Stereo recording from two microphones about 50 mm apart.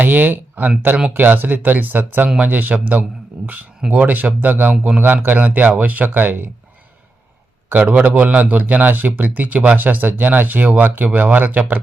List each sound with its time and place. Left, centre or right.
0.0 s speech: right
7.7 s speech: right